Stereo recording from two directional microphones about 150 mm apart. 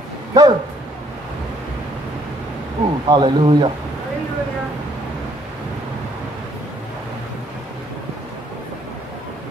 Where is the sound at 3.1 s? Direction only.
35° right (ahead or behind).